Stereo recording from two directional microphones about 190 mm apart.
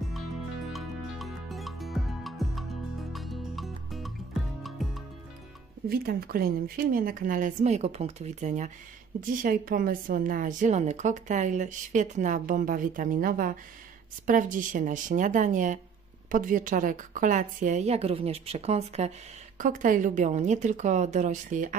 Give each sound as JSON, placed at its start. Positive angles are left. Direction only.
{"t": 0.7, "sound": "music", "side_deg": 0}
{"t": 5.9, "sound": "a woman's voice", "side_deg": -55}
{"t": 19.6, "sound": "a woman's voice", "side_deg": -45}